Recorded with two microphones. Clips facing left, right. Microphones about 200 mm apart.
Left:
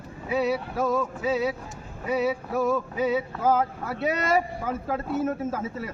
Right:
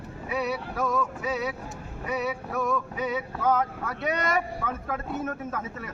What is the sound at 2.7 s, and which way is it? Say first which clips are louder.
A man's voice: left 5 dB; 30° left (ahead or behind).